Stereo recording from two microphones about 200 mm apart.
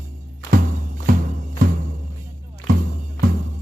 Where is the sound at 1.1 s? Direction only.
45° right (ahead or behind).